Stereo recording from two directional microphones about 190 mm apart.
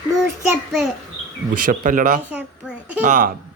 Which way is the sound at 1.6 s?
45° right (ahead or behind).